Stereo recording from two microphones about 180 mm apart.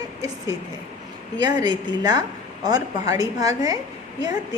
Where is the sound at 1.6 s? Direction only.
25° right (ahead or behind).